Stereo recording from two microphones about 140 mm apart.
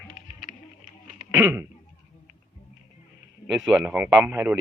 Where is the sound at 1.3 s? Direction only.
20° right (ahead or behind).